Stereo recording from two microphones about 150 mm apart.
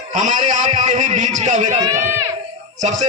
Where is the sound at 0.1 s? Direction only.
60° right (ahead or behind).